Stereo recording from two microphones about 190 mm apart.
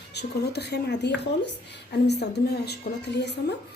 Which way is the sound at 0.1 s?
60° left (ahead or behind).